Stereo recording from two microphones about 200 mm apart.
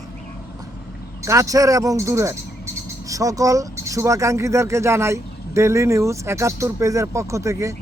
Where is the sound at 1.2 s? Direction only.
15° right (ahead or behind).